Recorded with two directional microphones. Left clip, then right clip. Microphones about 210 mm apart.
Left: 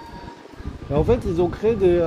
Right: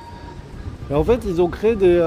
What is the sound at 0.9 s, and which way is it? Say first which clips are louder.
Speech: right 2 dB; 20° right (ahead or behind).